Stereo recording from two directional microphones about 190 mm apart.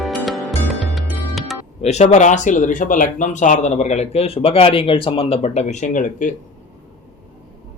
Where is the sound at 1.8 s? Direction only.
35° left (ahead or behind).